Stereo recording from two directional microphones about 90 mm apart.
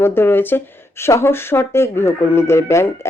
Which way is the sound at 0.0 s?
25° left (ahead or behind).